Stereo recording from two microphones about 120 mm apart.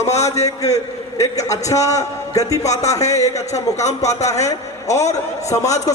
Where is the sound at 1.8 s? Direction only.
30° left (ahead or behind).